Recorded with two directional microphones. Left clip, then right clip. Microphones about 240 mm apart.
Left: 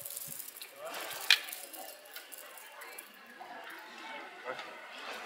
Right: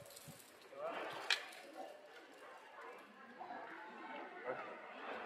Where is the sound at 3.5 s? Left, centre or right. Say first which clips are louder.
Left 5 dB; centre.